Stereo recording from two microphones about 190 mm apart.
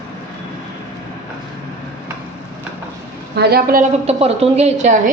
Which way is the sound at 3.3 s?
50° right (ahead or behind).